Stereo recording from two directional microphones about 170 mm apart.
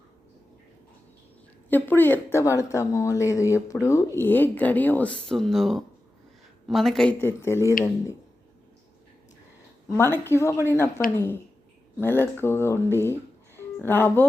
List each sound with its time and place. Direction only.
1.7 s speech: 10° left (ahead or behind)
10.0 s speech: 15° left (ahead or behind)